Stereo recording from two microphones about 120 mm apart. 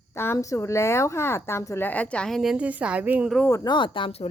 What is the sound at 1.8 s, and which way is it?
Speech, 10° left (ahead or behind).